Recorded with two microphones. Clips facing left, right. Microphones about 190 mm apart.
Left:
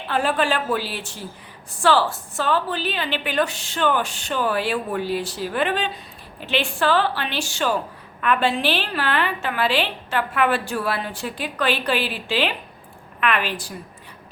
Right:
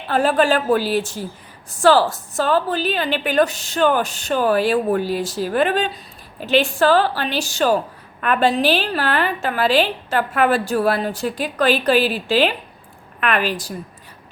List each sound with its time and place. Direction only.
0.1 s a woman's voice: 40° right (ahead or behind)